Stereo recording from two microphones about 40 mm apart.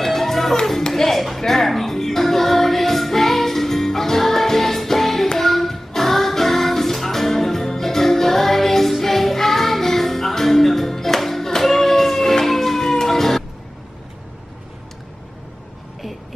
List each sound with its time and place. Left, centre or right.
0.0 s music: centre
0.8 s a sound: centre
1.4 s music: centre